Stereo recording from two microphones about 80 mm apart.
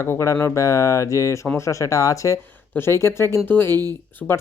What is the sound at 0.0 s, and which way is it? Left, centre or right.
Speech, left.